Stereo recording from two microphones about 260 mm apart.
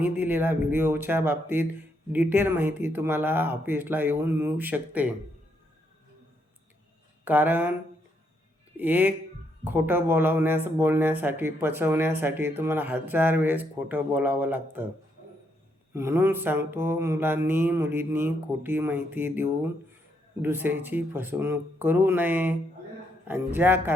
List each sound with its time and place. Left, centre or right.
0.0 s speech: centre
7.3 s speech: centre
8.8 s speech: centre
15.9 s speech: centre